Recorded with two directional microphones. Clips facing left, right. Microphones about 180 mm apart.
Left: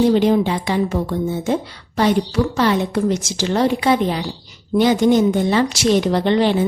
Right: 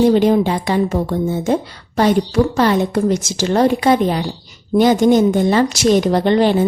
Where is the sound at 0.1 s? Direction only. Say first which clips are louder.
Right 2 dB; 45° right (ahead or behind).